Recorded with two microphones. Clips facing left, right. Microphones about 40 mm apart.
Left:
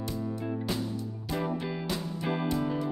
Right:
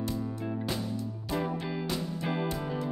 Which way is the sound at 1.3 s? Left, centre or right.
Centre.